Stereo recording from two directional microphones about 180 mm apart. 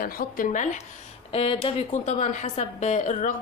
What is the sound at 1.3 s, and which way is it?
A woman's voice, 30° left (ahead or behind).